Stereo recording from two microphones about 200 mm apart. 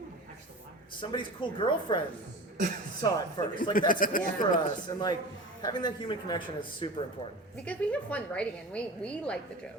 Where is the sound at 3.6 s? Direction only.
45° left (ahead or behind).